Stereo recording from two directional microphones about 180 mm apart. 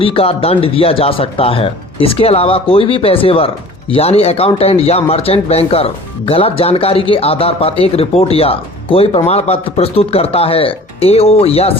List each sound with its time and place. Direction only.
0.0 s speech: 30° left (ahead or behind)